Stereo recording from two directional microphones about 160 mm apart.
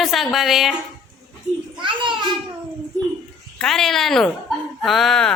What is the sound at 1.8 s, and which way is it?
Speech, 30° right (ahead or behind).